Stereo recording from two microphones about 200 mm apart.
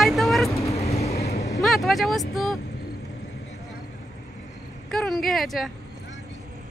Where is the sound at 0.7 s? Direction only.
30° left (ahead or behind).